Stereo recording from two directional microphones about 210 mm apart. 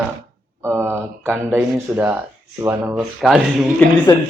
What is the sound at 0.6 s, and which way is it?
Speech, 10° right (ahead or behind).